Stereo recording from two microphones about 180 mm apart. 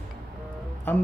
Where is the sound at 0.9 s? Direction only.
10° left (ahead or behind).